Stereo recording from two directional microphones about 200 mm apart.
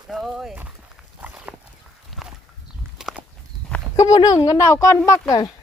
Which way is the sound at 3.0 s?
5° right (ahead or behind).